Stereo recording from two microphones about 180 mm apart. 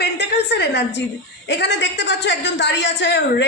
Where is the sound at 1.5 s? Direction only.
80° left.